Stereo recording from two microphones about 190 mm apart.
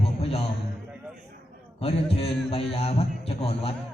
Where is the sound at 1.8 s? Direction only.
30° left (ahead or behind).